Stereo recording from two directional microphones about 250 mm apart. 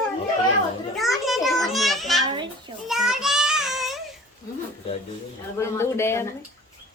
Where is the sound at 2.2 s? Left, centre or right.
Centre.